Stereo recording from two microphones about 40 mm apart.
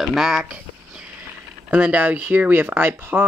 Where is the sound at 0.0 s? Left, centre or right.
Centre.